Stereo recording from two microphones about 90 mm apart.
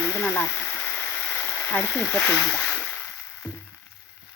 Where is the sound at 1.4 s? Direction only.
25° left (ahead or behind).